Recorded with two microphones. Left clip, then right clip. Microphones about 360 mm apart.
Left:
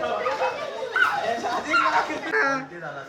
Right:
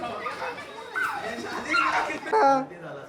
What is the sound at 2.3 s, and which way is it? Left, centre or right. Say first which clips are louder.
Speech: right 4 dB; centre.